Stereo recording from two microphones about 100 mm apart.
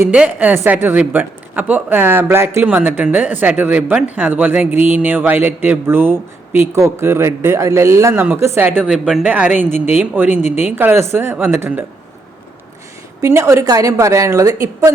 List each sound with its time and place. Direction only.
0.1 s speech: 15° right (ahead or behind)
13.2 s a woman's voice: 30° right (ahead or behind)